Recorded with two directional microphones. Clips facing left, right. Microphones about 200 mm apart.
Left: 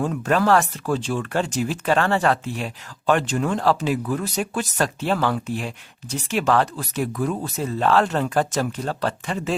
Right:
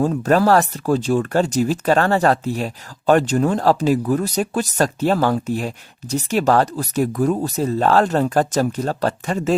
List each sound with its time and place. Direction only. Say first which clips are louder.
0.0 s speech: right 5 dB; 40° right (ahead or behind)